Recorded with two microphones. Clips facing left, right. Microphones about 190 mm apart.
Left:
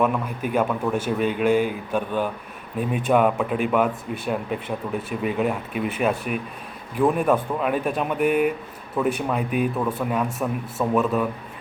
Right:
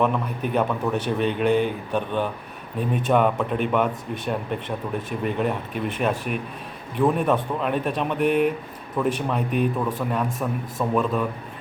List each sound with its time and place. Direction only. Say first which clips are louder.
0.0 s a man's voice: even; 5° left (ahead or behind)